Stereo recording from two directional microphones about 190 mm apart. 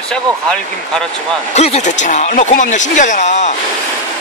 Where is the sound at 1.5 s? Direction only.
35° left (ahead or behind).